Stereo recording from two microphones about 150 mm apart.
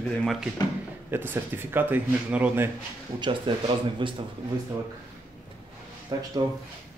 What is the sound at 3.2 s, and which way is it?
Speech, 35° right (ahead or behind).